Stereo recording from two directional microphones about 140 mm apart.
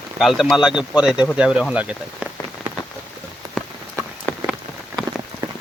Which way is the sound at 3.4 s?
30° right (ahead or behind).